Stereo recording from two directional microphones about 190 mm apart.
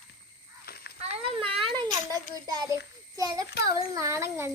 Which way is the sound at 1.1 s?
30° right (ahead or behind).